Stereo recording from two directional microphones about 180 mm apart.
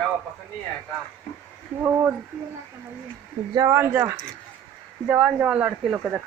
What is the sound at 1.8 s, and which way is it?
Speech, 10° right (ahead or behind).